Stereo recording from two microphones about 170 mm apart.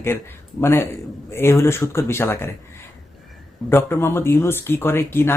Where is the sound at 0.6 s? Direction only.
15° left (ahead or behind).